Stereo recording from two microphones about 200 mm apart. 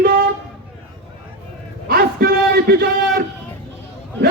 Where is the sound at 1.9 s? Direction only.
50° right (ahead or behind).